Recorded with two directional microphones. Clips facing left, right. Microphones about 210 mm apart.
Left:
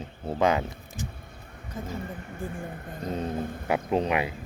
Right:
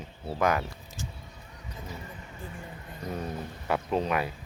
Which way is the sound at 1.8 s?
50° left (ahead or behind).